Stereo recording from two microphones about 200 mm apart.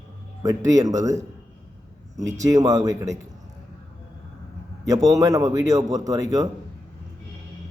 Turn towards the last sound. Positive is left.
turn(degrees=-15)  # may be behind; listen again after turning